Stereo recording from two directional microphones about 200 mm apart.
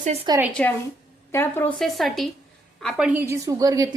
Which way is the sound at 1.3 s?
10° left (ahead or behind).